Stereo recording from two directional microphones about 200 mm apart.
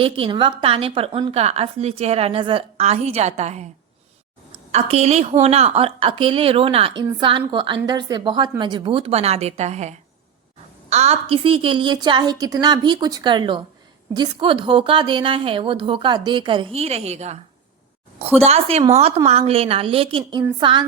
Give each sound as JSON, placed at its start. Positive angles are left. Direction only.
{"t": 0.0, "sound": "a woman's voice", "side_deg": -25}
{"t": 4.7, "sound": "a woman's voice", "side_deg": -30}
{"t": 18.3, "sound": "a woman's voice", "side_deg": -30}